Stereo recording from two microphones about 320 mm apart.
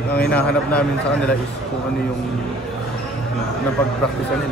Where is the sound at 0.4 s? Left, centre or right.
Centre.